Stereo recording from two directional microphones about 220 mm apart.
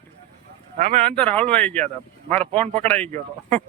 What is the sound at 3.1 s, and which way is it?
Speech, 30° right (ahead or behind).